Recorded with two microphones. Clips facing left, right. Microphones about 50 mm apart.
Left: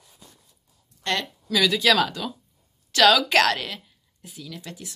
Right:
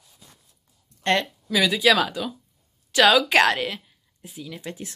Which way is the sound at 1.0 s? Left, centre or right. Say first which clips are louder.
Right 5 dB; right.